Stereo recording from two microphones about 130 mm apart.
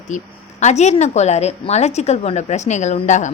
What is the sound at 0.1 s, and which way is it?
A woman's voice, 70° left (ahead or behind).